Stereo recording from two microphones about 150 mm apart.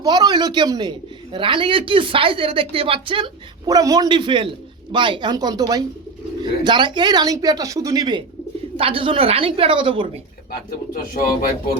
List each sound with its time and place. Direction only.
0.0 s a man's voice: 25° right (ahead or behind)
3.7 s a man's voice: 25° right (ahead or behind)
10.5 s speech: 75° left (ahead or behind)